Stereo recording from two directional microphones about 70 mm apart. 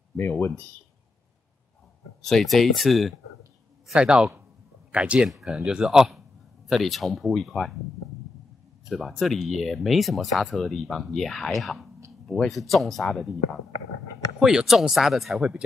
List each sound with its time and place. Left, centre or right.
0.1 s speech: left
2.2 s speech: centre
3.9 s speech: centre
5.3 s speech: centre
8.8 s speech: centre
14.4 s speech: centre